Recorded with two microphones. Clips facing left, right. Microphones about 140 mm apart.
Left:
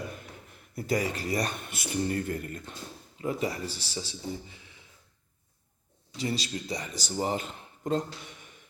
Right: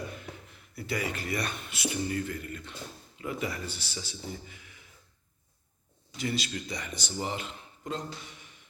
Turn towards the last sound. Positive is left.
turn(degrees=45)  # may be behind; listen again after turning